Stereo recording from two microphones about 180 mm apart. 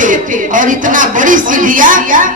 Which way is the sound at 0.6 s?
45° right (ahead or behind).